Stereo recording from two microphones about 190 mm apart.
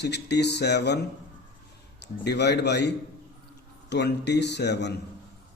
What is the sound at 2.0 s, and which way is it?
Speech, 60° left (ahead or behind).